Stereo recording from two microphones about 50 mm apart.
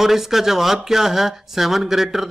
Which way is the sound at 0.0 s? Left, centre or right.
Centre.